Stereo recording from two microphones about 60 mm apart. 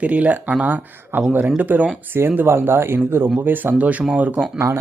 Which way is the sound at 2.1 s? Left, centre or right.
Right.